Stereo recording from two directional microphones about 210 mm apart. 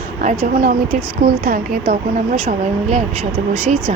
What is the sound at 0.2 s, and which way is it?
Speech, 40° right (ahead or behind).